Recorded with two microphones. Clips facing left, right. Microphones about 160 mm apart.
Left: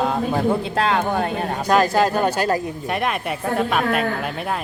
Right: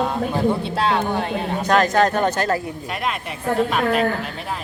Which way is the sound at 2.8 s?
55° left (ahead or behind).